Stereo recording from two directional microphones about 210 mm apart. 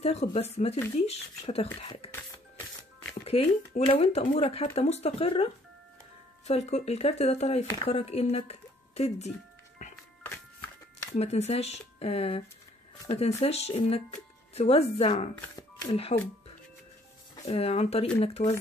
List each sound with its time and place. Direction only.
0.0 s speech: 30° left (ahead or behind)
3.3 s speech: 30° left (ahead or behind)
9.8 s music: 35° left (ahead or behind)
11.1 s speech: 30° left (ahead or behind)
15.3 s speech: 15° left (ahead or behind)
17.5 s speech: 30° left (ahead or behind)